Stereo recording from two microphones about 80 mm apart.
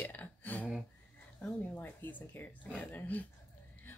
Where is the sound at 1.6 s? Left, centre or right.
Left.